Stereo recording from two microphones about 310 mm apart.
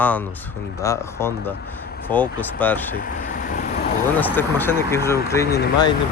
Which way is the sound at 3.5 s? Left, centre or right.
Left.